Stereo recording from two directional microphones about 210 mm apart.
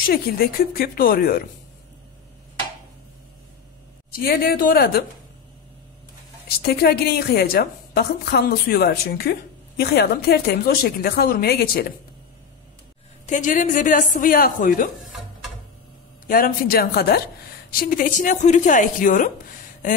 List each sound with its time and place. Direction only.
0.0 s a woman's voice: 45° left (ahead or behind)
4.1 s a woman's voice: 45° left (ahead or behind)
6.5 s a woman's voice: 45° left (ahead or behind)
13.3 s speech: 40° left (ahead or behind)
16.3 s a woman's voice: 40° left (ahead or behind)